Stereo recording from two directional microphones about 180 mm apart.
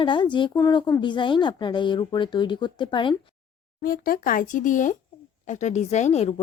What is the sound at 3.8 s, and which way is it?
Speech, 55° left (ahead or behind).